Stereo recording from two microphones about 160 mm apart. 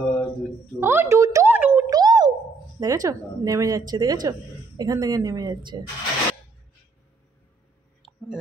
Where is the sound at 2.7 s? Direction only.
20° right (ahead or behind).